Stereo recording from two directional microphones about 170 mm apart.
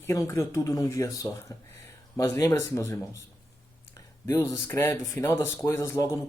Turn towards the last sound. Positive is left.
turn(degrees=15)  # may be behind; listen again after turning